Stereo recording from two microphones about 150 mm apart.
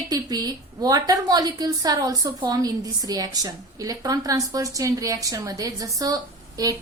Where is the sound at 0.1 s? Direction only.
25° right (ahead or behind).